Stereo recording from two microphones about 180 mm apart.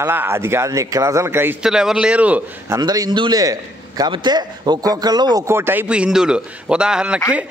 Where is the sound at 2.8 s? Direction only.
25° right (ahead or behind).